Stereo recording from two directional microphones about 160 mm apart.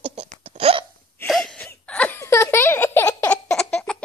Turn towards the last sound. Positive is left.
turn(degrees=5)  # may be behind; listen again after turning